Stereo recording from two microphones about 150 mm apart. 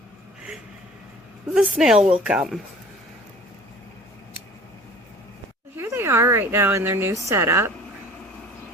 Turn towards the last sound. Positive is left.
turn(degrees=-15)  # may be behind; listen again after turning